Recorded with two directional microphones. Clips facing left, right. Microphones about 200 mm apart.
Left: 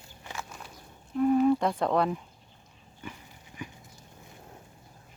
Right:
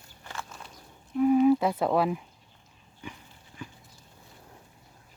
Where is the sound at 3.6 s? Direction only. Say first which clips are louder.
Left 2 dB; 15° left (ahead or behind).